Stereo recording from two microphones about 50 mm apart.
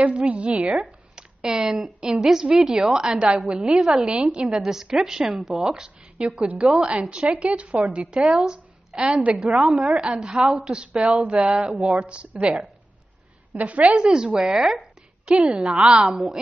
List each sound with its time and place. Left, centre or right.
0.0 s a woman's voice: right
1.4 s a woman's voice: centre
3.2 s a woman's voice: right
3.7 s a woman's voice: centre
11.5 s a woman's voice: centre
11.8 s a woman's voice: right
15.9 s a woman's voice: centre